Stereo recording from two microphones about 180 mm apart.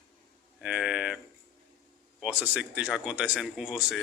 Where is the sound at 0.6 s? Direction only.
5° right (ahead or behind).